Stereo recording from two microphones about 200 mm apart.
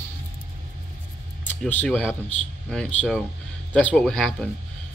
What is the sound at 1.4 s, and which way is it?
Speech, 10° left (ahead or behind).